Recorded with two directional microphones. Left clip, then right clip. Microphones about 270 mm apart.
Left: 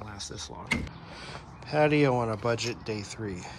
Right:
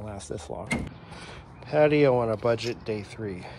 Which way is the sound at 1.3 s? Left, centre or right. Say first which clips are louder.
Right 4 dB; centre.